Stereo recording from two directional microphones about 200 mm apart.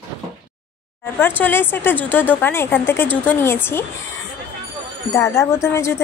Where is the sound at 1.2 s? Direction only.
10° left (ahead or behind).